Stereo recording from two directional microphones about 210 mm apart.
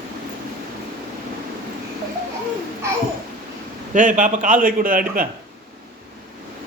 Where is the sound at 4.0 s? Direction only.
40° right (ahead or behind).